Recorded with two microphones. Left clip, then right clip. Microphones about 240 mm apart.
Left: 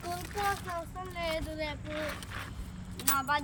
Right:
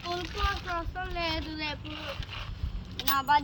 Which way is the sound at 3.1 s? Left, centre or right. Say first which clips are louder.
Right 5 dB; centre.